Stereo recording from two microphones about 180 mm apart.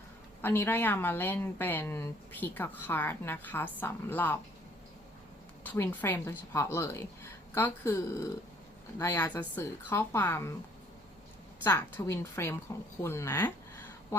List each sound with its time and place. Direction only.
0.4 s a woman's voice: 10° left (ahead or behind)
5.6 s a woman's voice: 10° left (ahead or behind)
11.6 s a woman's voice: 10° left (ahead or behind)